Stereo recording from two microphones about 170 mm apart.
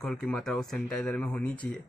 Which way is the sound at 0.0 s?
5° left (ahead or behind).